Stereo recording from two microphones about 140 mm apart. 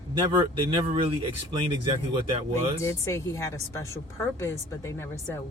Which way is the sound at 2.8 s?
20° left (ahead or behind).